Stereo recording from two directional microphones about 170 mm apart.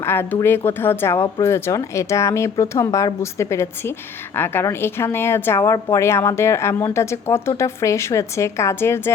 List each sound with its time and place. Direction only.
0.0 s speech: 15° left (ahead or behind)